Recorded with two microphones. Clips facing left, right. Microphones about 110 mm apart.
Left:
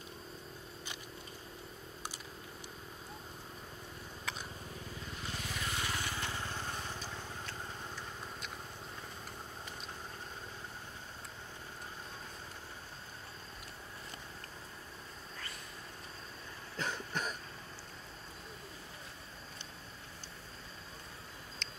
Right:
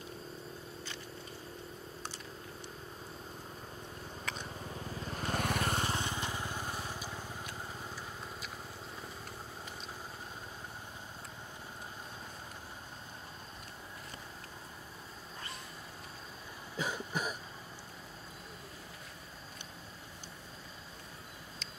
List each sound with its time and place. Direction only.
4.2 s a sound: 5° left (ahead or behind)
5.1 s vehicle: 55° right (ahead or behind)
5.8 s vehicle: 30° right (ahead or behind); by 8.5 s 10° right (ahead or behind)
16.7 s cough: 10° right (ahead or behind)